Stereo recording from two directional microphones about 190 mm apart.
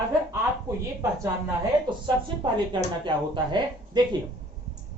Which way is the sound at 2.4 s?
25° right (ahead or behind).